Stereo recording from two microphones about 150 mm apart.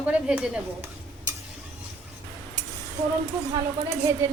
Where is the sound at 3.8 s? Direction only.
20° right (ahead or behind).